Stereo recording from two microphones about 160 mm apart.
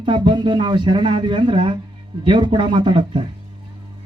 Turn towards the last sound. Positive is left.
turn(degrees=-30)  # may be behind; listen again after turning